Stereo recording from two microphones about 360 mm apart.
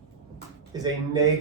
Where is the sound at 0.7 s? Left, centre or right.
Centre.